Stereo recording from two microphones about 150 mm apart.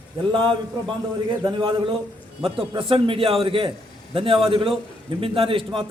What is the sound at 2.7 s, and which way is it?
A man's voice, 35° right (ahead or behind).